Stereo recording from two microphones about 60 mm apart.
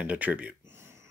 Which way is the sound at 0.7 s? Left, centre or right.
Right.